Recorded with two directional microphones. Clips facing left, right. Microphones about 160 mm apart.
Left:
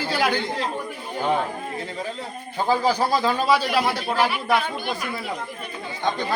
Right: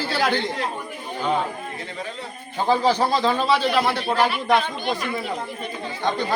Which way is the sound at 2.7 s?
10° left (ahead or behind).